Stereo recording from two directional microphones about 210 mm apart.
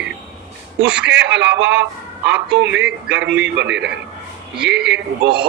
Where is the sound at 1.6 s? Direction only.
60° right (ahead or behind).